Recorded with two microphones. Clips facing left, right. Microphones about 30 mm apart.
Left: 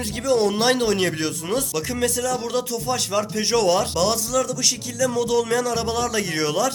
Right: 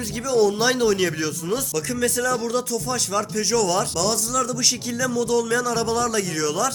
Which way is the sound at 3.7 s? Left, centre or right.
Centre.